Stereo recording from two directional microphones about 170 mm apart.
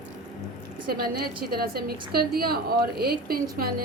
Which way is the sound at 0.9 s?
65° right (ahead or behind).